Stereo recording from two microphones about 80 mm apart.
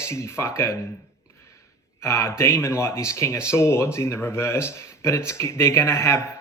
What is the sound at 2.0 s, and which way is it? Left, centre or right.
Speech, left.